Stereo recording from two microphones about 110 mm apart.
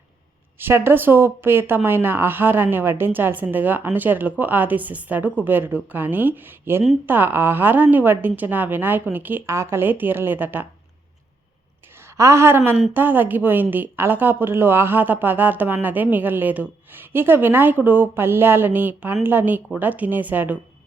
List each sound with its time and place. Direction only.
0.6 s a woman's voice: 20° right (ahead or behind)
11.9 s a woman's voice: 25° right (ahead or behind)